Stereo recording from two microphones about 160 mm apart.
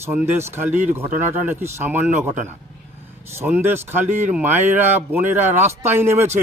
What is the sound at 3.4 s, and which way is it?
A man's voice, 15° right (ahead or behind).